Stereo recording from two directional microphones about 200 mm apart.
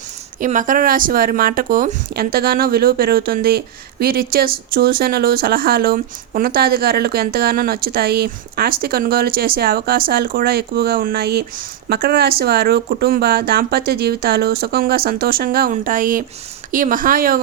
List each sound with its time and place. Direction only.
0.3 s speech: 40° right (ahead or behind)